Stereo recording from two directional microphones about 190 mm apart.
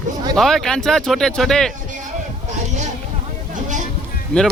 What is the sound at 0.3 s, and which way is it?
Speech, centre (ahead or behind).